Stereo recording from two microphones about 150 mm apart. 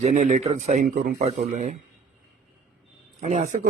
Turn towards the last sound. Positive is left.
turn(degrees=-55)  # may be behind; listen again after turning